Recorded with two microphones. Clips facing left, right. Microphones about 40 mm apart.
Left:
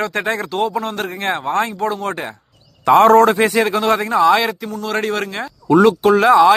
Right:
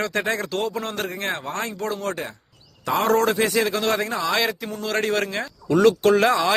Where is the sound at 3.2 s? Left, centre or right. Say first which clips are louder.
Left 6 dB; left.